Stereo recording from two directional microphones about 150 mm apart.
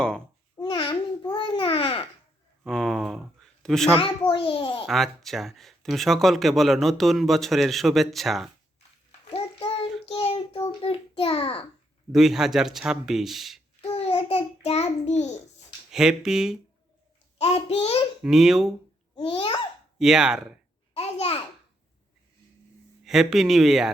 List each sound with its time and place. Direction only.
0.5 s babbling: 30° left (ahead or behind)
2.6 s a sound: centre (ahead or behind)
4.3 s a sound: 35° left (ahead or behind)
4.9 s speech: centre (ahead or behind)
9.3 s child singing: 35° left (ahead or behind)
12.1 s speech: centre (ahead or behind)
13.9 s child singing: 40° left (ahead or behind)
15.9 s speech: 5° right (ahead or behind)
17.3 s child singing: 45° left (ahead or behind)
18.2 s speech: 5° right (ahead or behind)
19.1 s babbling: 35° left (ahead or behind)
20.0 s speech: 5° right (ahead or behind)
20.9 s babbling: 40° left (ahead or behind)
23.0 s speech: centre (ahead or behind)